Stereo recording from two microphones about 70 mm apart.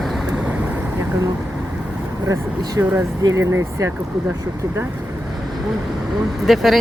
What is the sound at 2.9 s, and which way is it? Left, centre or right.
Speech, right.